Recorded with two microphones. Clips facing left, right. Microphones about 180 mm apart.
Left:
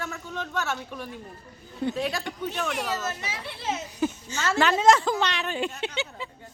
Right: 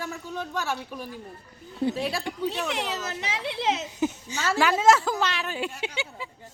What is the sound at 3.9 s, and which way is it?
Speech, 15° right (ahead or behind).